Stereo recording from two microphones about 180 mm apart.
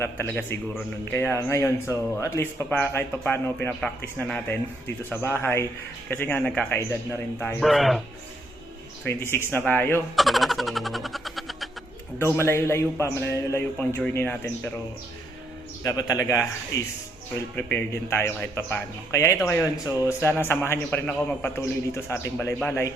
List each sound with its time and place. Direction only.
0.0 s speech: 10° left (ahead or behind)
7.6 s a man's voice: centre (ahead or behind)
9.3 s speech: 10° left (ahead or behind)
10.2 s a sound: centre (ahead or behind)
12.2 s speech: 15° left (ahead or behind)
15.8 s a man's voice: 20° left (ahead or behind)